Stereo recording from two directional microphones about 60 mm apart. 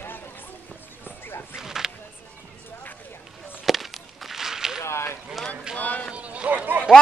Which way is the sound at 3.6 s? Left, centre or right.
Centre.